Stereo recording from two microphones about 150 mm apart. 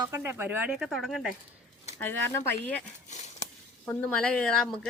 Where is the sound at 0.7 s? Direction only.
Centre (ahead or behind).